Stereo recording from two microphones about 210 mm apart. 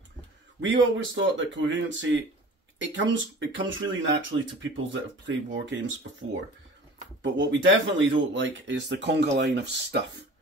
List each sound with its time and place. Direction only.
0.6 s speech: 60° right (ahead or behind)